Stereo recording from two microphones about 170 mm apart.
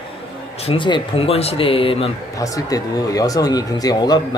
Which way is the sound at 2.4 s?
20° left (ahead or behind).